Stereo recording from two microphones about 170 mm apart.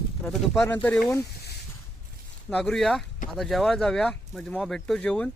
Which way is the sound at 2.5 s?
5° left (ahead or behind).